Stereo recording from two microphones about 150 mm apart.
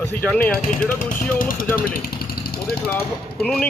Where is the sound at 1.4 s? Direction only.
70° left (ahead or behind).